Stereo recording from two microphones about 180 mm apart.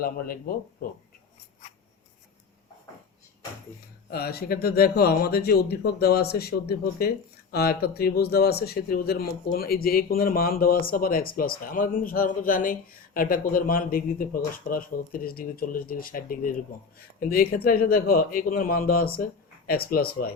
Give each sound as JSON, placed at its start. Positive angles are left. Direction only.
{"t": 0.0, "sound": "speech", "side_deg": 55}
{"t": 4.1, "sound": "speech", "side_deg": 60}